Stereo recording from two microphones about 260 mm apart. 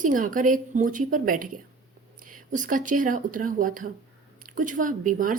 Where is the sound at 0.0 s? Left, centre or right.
Right.